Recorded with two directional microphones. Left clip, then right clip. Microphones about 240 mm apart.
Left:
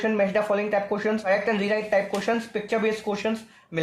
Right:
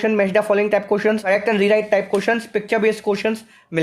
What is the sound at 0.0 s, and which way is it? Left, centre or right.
Speech, right.